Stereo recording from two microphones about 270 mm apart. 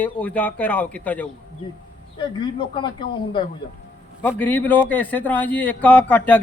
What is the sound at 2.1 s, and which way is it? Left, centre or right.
Speech, centre.